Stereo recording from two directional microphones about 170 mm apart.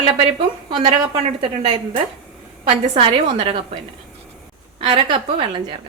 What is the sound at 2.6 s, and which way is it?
Speech, 35° right (ahead or behind).